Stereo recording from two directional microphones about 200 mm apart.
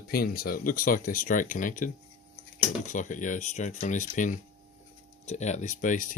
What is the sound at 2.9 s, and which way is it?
Speech, 40° left (ahead or behind).